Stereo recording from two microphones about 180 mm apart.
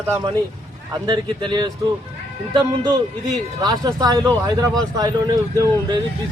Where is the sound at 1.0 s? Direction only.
25° right (ahead or behind).